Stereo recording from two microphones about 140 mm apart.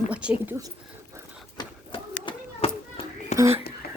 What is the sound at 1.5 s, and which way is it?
Children playing, 35° left (ahead or behind).